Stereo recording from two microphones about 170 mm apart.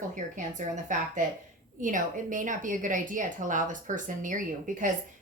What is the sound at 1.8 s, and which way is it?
A woman's voice, 50° right (ahead or behind).